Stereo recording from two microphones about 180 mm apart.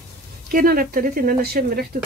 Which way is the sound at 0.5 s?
55° right (ahead or behind).